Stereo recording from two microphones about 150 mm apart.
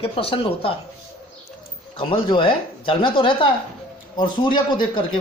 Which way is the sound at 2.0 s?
35° left (ahead or behind).